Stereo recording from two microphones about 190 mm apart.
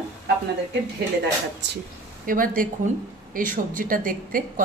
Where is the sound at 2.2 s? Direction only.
45° right (ahead or behind).